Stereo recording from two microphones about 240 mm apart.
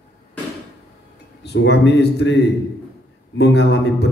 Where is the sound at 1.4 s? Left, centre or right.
Left.